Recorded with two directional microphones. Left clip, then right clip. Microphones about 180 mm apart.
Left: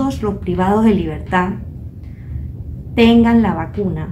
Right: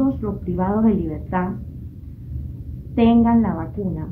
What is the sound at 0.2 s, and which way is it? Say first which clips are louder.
A woman's voice: left 6 dB; 15° left (ahead or behind).